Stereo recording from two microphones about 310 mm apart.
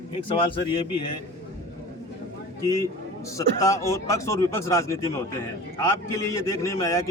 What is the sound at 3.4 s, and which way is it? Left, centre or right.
Speech, centre.